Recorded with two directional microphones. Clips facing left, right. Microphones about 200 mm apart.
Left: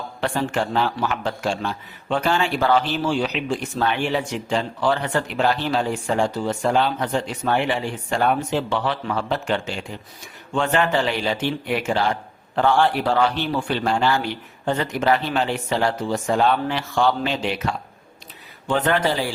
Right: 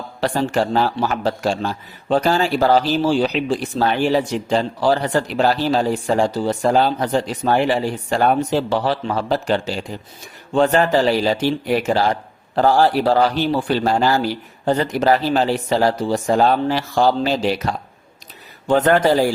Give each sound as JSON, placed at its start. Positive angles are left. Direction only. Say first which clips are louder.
{"t": 0.2, "sound": "a man's voice", "louder": "right 4 dB", "side_deg": -35}